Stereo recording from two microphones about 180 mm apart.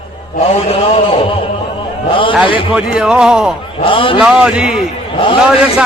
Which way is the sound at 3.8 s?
30° left (ahead or behind).